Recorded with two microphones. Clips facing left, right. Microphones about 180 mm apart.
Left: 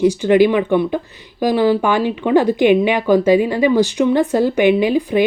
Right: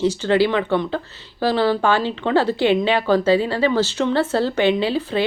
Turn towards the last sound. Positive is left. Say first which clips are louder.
# left 5 dB
turn(degrees=15)  # may be behind; listen again after turning